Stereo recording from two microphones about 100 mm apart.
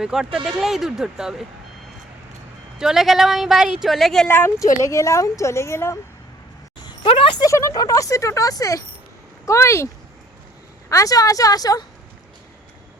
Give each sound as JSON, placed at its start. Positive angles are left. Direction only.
{"t": 0.0, "sound": "speech", "side_deg": -5}
{"t": 2.7, "sound": "speech", "side_deg": -5}
{"t": 4.3, "sound": "a woman's voice", "side_deg": 20}
{"t": 6.8, "sound": "a sound", "side_deg": 65}
{"t": 7.3, "sound": "a woman's voice", "side_deg": 30}